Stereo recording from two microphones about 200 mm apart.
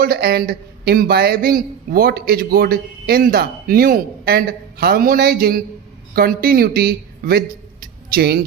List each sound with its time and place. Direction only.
0.0 s a man's voice: 50° right (ahead or behind)